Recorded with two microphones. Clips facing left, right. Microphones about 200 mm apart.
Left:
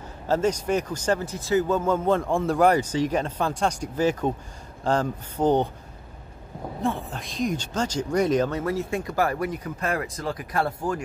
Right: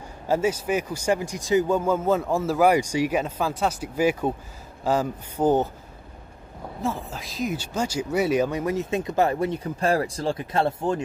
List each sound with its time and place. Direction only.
0.3 s speech: 5° right (ahead or behind)
6.8 s speech: centre (ahead or behind); by 11.1 s 25° right (ahead or behind)